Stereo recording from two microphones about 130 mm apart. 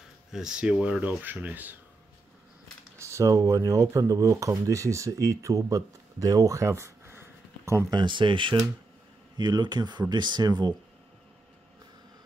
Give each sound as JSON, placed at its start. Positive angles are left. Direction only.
{"t": 0.3, "sound": "speech", "side_deg": -5}
{"t": 3.0, "sound": "speech", "side_deg": -20}
{"t": 7.9, "sound": "speech", "side_deg": -35}